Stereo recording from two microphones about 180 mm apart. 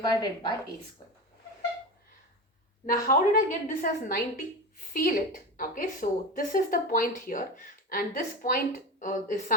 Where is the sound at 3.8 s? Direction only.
50° left (ahead or behind).